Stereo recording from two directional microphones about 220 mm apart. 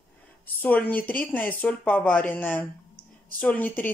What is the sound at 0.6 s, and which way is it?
Speech, 5° left (ahead or behind).